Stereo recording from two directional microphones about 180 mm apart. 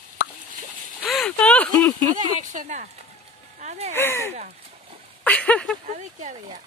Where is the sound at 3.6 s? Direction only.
40° right (ahead or behind).